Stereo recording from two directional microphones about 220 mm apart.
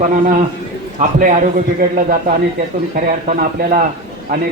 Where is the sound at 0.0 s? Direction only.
35° right (ahead or behind).